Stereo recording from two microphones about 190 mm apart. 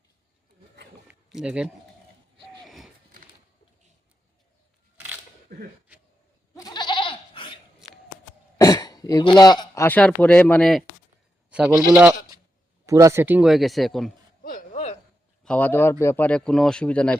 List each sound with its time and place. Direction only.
1.0 s a sound: 5° right (ahead or behind)
6.5 s goat: 20° left (ahead or behind)
8.5 s speech: 20° left (ahead or behind); by 10.8 s centre (ahead or behind)
11.5 s bleat: 5° right (ahead or behind)
12.8 s speech: 15° right (ahead or behind); by 14.1 s centre (ahead or behind)
14.4 s a sound: 45° left (ahead or behind)
15.4 s a man's voice: 10° left (ahead or behind)